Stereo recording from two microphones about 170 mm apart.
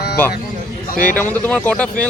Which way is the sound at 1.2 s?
10° left (ahead or behind).